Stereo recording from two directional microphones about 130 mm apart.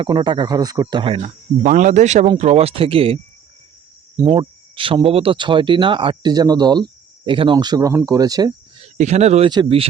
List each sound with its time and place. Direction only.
0.0 s speech: 35° right (ahead or behind)
1.6 s speech: 75° right (ahead or behind); by 3.2 s 45° right (ahead or behind)
4.3 s speech: 40° right (ahead or behind)
6.3 s speech: 30° right (ahead or behind)
9.0 s speech: 60° right (ahead or behind)
9.5 s speech: 40° right (ahead or behind)